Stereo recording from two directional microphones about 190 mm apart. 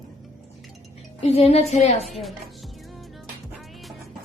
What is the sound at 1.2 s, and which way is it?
Speech, 35° left (ahead or behind).